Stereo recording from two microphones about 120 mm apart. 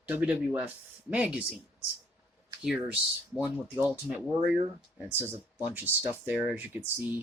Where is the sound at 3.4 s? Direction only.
15° right (ahead or behind).